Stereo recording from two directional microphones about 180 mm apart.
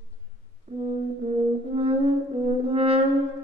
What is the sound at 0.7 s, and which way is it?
Brass instrument, 35° right (ahead or behind).